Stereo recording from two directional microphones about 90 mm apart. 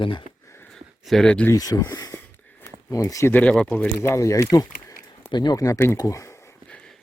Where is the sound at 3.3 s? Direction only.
15° left (ahead or behind).